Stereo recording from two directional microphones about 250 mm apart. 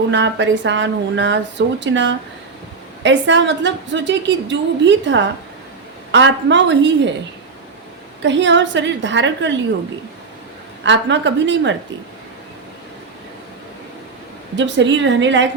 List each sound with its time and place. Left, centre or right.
0.1 s a woman's voice: right
8.2 s a woman's voice: right
10.8 s a woman's voice: right
14.5 s a woman's voice: right